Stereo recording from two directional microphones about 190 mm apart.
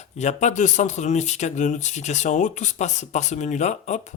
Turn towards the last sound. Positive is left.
turn(degrees=40)  # may be behind; listen again after turning